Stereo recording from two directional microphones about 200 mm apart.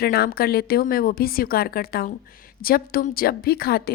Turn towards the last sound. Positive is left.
turn(degrees=50)  # may be behind; listen again after turning